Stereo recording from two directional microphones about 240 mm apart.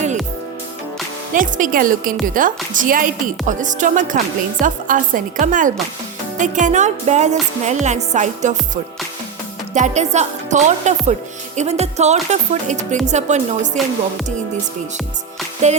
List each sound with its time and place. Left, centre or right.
1.3 s a woman's voice: right
15.6 s speech: right